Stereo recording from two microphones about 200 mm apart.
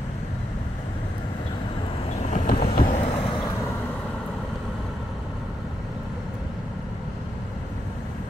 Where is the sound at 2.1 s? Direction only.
35° left (ahead or behind).